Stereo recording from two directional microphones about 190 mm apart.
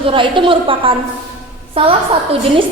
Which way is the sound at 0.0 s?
25° right (ahead or behind).